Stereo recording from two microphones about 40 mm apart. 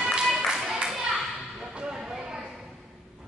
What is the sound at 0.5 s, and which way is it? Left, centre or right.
Clapping, centre.